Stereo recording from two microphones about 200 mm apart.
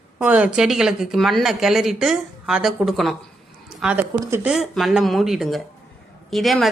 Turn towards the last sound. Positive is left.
turn(degrees=0)  # may be behind; listen again after turning